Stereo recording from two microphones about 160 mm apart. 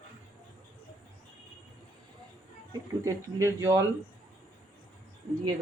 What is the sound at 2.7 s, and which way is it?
Speech, 20° right (ahead or behind).